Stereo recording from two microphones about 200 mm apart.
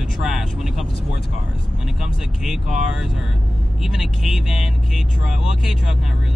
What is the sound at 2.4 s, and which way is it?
Speech, 5° right (ahead or behind).